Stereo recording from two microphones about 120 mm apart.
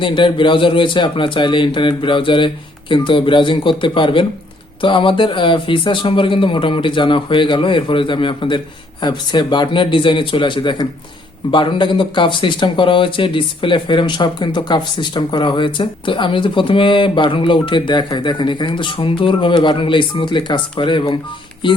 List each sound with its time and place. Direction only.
0.0 s speech: 45° left (ahead or behind)